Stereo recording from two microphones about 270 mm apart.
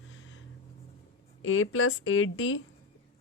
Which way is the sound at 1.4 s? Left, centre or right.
Left.